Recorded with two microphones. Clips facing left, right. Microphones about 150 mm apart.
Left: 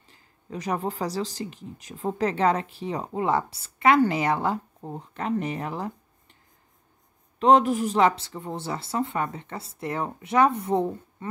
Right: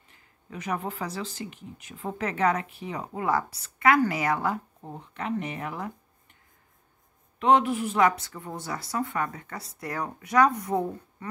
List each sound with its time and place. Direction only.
0.1 s speech: 35° left (ahead or behind)
7.3 s speech: 40° left (ahead or behind)